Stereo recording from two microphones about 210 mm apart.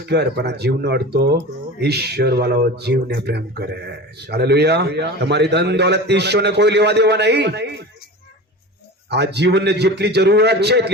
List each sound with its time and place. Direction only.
0.0 s speech: 50° right (ahead or behind)
9.0 s speech: 55° right (ahead or behind)